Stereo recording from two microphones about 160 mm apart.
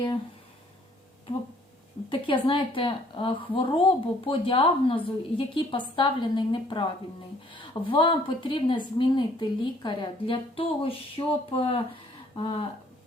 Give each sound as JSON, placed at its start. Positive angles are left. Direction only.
{"t": 2.0, "sound": "a woman's voice", "side_deg": 30}